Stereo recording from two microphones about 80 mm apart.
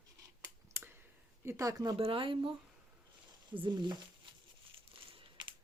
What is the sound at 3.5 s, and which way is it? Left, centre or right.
Speech, right.